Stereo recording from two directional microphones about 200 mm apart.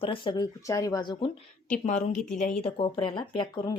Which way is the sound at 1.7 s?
35° left (ahead or behind).